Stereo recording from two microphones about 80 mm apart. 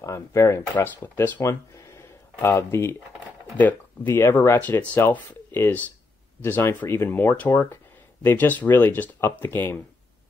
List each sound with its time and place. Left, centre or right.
0.0 s speech: left
3.5 s speech: left